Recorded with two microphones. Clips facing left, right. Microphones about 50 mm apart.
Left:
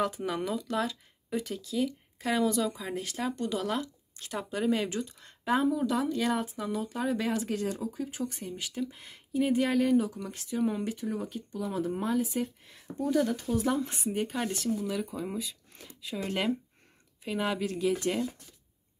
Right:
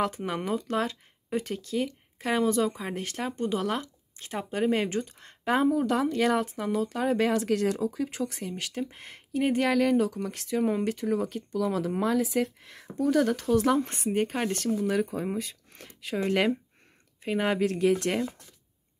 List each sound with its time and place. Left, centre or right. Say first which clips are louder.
0.5 s speech: right 3 dB; right
3.3 s speech: right 5 dB; right
6.8 s speech: right 6 dB; right
10.3 s speech: right 5 dB; right
10.6 s speech: right 3 dB; right
17.2 s speech: right 5 dB; right
17.6 s speech: right 4 dB; right